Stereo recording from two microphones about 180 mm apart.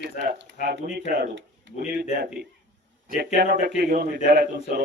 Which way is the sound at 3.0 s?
55° right (ahead or behind).